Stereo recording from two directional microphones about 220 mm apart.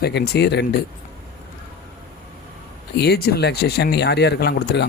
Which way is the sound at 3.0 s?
45° left (ahead or behind).